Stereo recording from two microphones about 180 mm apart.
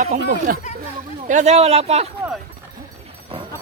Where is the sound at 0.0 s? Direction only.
45° right (ahead or behind).